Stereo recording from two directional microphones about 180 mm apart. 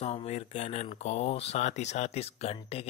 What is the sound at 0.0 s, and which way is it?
Speech, 35° left (ahead or behind).